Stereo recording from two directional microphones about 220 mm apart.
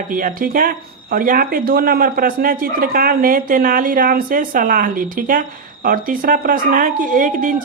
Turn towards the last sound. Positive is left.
turn(degrees=-35)  # may be behind; listen again after turning